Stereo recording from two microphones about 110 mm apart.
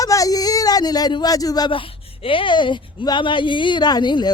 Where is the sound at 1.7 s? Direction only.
50° left (ahead or behind).